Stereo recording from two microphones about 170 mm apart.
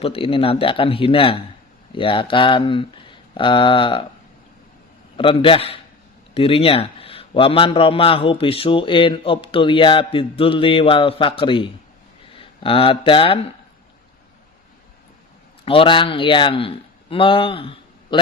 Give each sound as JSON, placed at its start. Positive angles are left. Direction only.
{"t": 0.0, "sound": "a man's voice", "side_deg": 30}
{"t": 5.1, "sound": "a man's voice", "side_deg": 30}
{"t": 15.6, "sound": "speech", "side_deg": 30}